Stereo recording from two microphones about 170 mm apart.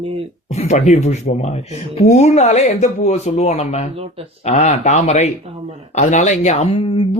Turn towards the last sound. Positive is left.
turn(degrees=30)  # may be behind; listen again after turning